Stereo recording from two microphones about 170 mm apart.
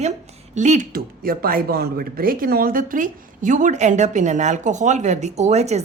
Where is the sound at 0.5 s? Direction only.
45° right (ahead or behind).